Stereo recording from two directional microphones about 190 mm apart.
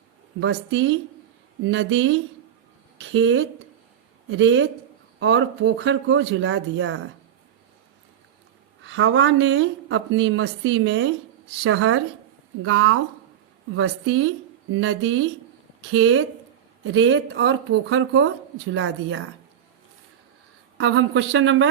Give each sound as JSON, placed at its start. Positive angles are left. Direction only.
{"t": 0.3, "sound": "a woman's voice", "side_deg": -80}
{"t": 8.8, "sound": "a woman's voice", "side_deg": -90}
{"t": 16.8, "sound": "speech", "side_deg": -70}
{"t": 18.7, "sound": "speech", "side_deg": -70}
{"t": 20.7, "sound": "a woman's voice", "side_deg": -90}